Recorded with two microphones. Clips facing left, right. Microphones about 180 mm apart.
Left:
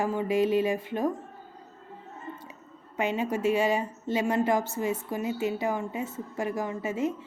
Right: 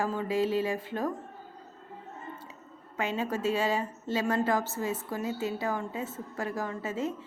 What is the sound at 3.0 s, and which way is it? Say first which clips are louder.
A woman's voice: left 3 dB; 15° left (ahead or behind).